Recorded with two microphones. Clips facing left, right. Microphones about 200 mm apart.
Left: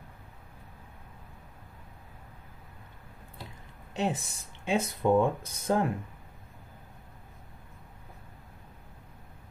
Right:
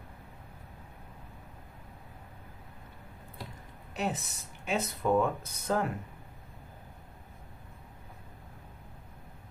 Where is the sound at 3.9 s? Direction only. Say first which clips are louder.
Left 3 dB; 30° left (ahead or behind).